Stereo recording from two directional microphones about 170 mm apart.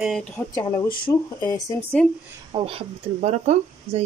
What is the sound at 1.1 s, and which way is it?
Speech, 20° left (ahead or behind).